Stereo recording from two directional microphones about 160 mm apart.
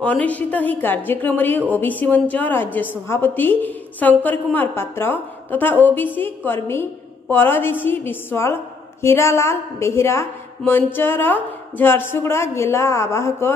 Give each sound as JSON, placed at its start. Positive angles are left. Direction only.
{"t": 0.0, "sound": "a woman's voice", "side_deg": 10}